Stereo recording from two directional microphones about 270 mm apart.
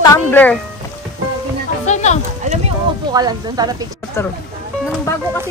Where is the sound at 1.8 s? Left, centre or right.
Left.